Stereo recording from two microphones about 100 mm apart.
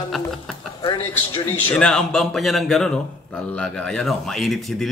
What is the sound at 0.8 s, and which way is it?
Speech, 55° left (ahead or behind).